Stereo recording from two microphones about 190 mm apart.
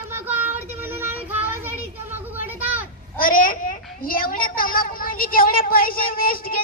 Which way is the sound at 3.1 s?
50° left (ahead or behind).